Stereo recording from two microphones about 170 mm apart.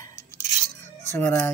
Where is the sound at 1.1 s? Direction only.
15° left (ahead or behind).